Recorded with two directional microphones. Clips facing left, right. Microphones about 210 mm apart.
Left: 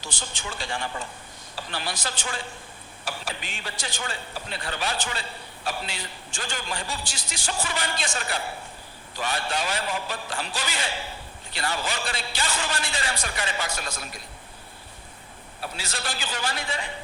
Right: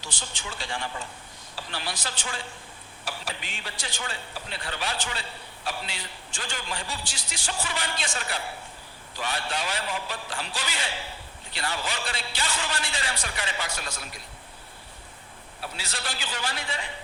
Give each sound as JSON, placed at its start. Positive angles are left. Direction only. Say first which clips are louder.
{"t": 0.1, "sound": "a man's voice", "louder": "left 2 dB", "side_deg": 45}
{"t": 15.8, "sound": "a man's voice", "louder": "left 3 dB", "side_deg": 45}